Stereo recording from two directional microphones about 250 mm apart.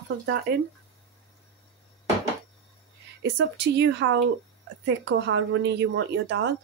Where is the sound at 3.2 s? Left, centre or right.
Right.